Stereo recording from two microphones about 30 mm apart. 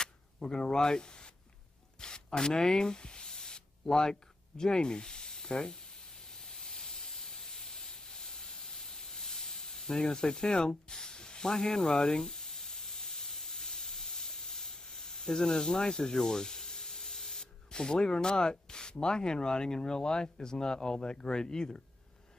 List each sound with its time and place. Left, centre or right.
0.0 s a sound: left
2.0 s spray: left
6.5 s hiss: left
10.1 s speech: left
12.2 s steam: centre
16.2 s spray: left
17.7 s speech: left